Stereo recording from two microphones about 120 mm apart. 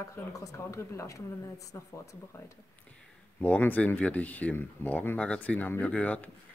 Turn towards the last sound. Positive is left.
turn(degrees=10)  # may be behind; listen again after turning